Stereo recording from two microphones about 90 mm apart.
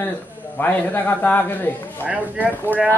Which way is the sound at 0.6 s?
20° left (ahead or behind).